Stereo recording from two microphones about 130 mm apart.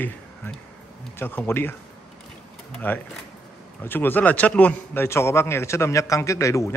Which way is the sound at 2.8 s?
15° left (ahead or behind).